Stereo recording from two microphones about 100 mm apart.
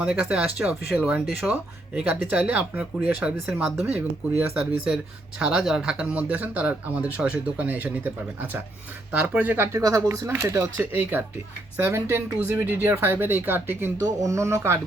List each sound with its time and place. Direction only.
0.0 s speech: 15° right (ahead or behind)
1.4 s speech: 5° right (ahead or behind)
2.0 s speech: 15° right (ahead or behind)
3.4 s speech: centre (ahead or behind)
3.8 s speech: 15° right (ahead or behind)
9.7 s speech: 30° right (ahead or behind)
11.9 s speech: 25° right (ahead or behind)